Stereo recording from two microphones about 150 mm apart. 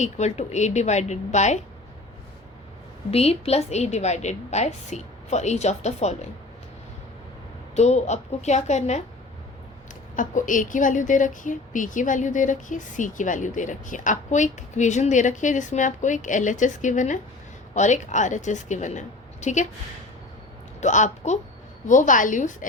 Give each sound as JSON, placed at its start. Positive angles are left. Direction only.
{"t": 0.0, "sound": "a woman's voice", "side_deg": 50}
{"t": 3.1, "sound": "a woman's voice", "side_deg": 45}
{"t": 7.8, "sound": "a woman's voice", "side_deg": 50}
{"t": 10.2, "sound": "a woman's voice", "side_deg": 60}
{"t": 20.8, "sound": "a woman's voice", "side_deg": 50}